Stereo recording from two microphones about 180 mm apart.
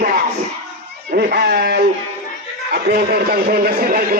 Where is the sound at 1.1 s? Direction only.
60° right (ahead or behind).